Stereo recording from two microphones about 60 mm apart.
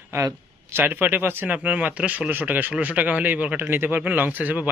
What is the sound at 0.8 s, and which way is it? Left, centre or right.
Speech, right.